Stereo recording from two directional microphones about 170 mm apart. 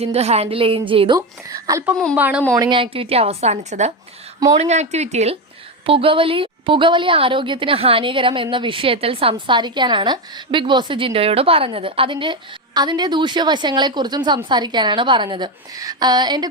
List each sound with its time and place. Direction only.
0.0 s a woman's voice: 35° right (ahead or behind); by 1.8 s 20° right (ahead or behind)
2.1 s speech: 10° right (ahead or behind)
2.6 s a woman's voice: 30° right (ahead or behind)